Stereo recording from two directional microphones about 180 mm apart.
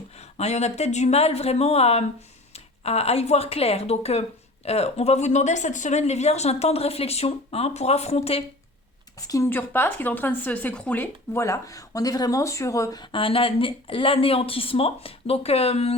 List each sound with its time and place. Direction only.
0.3 s a woman's voice: 35° left (ahead or behind)
9.2 s a woman's voice: 20° left (ahead or behind); by 16.0 s 35° left (ahead or behind)